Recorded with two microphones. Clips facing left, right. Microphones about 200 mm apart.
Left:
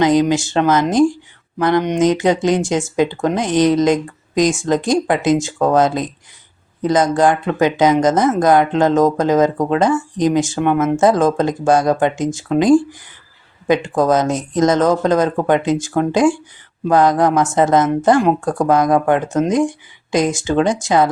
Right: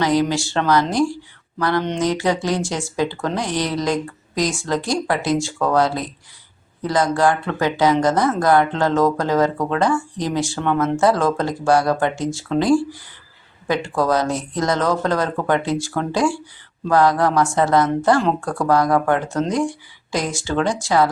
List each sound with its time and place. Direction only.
0.0 s speech: 20° left (ahead or behind)